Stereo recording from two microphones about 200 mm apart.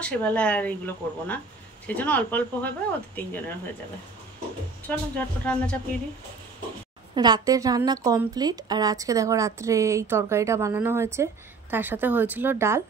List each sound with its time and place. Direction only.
0.0 s speech: 5° left (ahead or behind)
4.8 s speech: 5° left (ahead or behind)
7.2 s a woman's voice: 20° right (ahead or behind)